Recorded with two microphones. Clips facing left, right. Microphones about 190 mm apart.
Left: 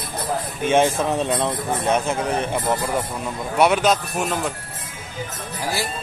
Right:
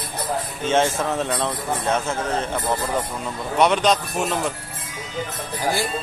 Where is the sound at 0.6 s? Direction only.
15° left (ahead or behind).